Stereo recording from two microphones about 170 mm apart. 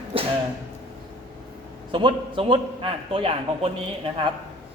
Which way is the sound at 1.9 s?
30° right (ahead or behind).